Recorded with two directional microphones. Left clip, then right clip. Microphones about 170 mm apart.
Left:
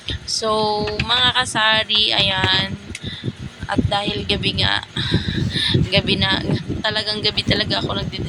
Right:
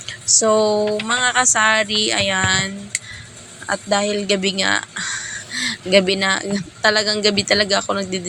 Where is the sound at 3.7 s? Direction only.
20° right (ahead or behind).